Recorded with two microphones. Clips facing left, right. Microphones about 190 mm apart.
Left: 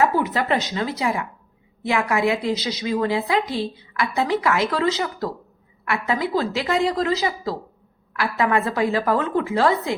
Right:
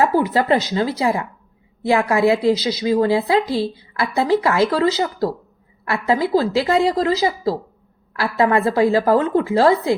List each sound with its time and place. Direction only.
0.0 s a woman's voice: 35° right (ahead or behind)